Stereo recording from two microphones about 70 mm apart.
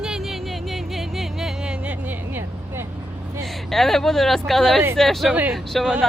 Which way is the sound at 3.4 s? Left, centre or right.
Centre.